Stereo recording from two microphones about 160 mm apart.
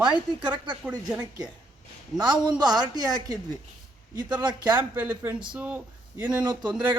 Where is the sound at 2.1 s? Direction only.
25° right (ahead or behind).